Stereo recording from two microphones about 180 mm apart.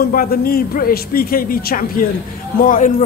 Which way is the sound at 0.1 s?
55° left (ahead or behind).